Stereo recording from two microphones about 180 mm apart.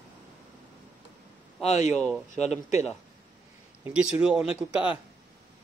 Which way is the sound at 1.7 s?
40° left (ahead or behind).